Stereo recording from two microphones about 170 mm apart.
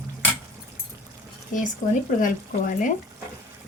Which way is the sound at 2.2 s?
50° left (ahead or behind).